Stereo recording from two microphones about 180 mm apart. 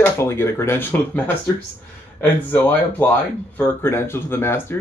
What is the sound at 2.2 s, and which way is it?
Speech, 10° left (ahead or behind).